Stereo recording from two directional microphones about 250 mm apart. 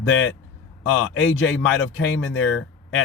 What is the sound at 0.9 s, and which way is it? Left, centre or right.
A man's voice, left.